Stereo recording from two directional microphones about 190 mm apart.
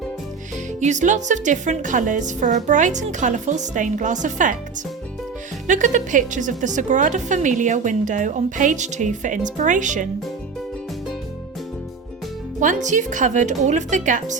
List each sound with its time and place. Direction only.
0.8 s a woman's voice: 40° right (ahead or behind)
5.6 s a woman's voice: 40° right (ahead or behind)
12.5 s a woman's voice: 40° right (ahead or behind)